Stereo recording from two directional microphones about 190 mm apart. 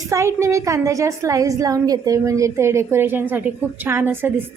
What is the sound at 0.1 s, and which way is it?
A woman's voice, 15° right (ahead or behind).